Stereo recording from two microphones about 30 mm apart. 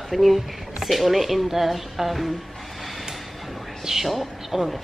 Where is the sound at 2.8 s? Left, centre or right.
Centre.